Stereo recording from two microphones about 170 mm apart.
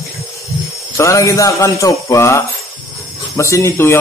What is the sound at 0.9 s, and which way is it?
A man's voice, 15° left (ahead or behind).